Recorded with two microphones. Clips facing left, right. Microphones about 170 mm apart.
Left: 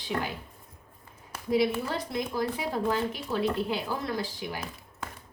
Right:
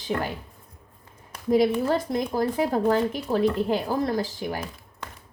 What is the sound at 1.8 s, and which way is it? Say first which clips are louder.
Speech: right 7 dB; 45° right (ahead or behind).